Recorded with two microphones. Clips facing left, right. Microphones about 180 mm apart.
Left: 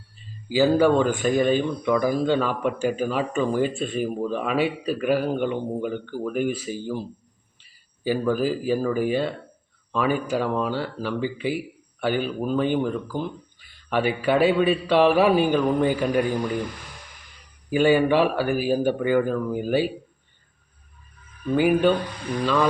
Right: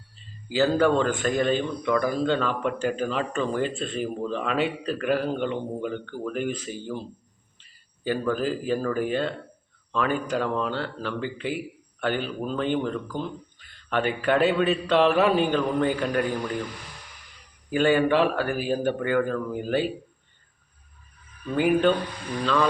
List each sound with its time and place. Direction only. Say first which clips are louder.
0.5 s a man's voice: left 3 dB; 10° left (ahead or behind)
17.7 s a man's voice: left 2 dB; 10° left (ahead or behind)
21.5 s a man's voice: left 2 dB; 10° left (ahead or behind)